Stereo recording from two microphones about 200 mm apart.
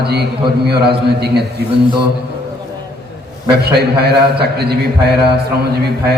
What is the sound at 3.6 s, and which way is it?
A man's voice, 55° right (ahead or behind).